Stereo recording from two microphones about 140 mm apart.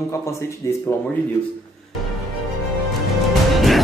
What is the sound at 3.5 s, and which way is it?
Music, centre (ahead or behind).